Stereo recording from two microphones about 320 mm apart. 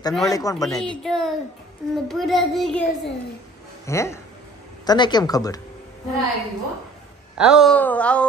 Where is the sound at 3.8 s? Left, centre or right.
Centre.